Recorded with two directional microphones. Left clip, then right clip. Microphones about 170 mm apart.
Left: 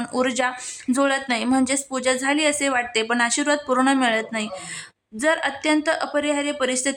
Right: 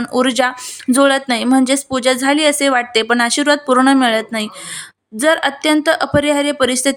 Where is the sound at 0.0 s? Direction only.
25° right (ahead or behind).